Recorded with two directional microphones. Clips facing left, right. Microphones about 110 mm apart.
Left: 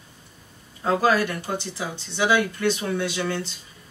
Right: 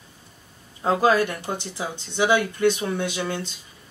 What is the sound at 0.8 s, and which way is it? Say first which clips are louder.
Speech: right 1 dB; 20° right (ahead or behind).